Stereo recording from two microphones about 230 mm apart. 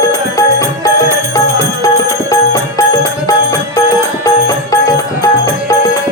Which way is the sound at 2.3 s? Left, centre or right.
Centre.